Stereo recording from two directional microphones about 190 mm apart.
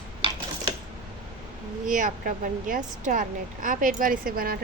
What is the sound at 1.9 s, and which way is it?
A woman's voice, 45° right (ahead or behind).